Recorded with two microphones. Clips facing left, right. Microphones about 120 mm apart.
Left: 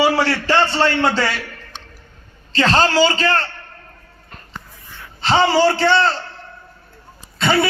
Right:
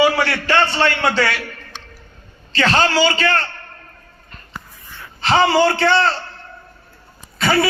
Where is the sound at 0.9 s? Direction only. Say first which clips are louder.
Left 1 dB; 30° left (ahead or behind).